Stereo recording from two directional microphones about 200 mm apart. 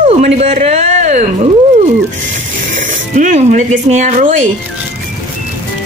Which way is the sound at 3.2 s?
40° right (ahead or behind).